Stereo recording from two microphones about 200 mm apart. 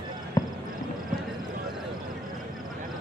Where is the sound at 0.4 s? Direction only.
20° left (ahead or behind).